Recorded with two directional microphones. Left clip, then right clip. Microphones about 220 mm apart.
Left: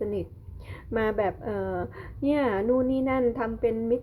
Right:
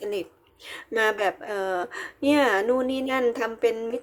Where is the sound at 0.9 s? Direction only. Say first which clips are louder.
Right 3 dB; 15° right (ahead or behind).